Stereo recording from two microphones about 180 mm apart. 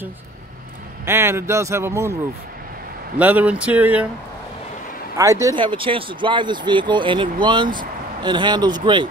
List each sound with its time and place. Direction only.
1.0 s speech: 15° right (ahead or behind)
3.2 s speech: 10° right (ahead or behind)
5.1 s speech: 15° right (ahead or behind)